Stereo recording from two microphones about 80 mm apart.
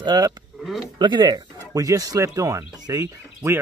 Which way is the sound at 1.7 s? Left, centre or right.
Right.